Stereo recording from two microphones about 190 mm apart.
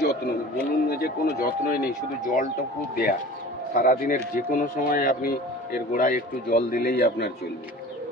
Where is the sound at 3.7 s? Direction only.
45° left (ahead or behind).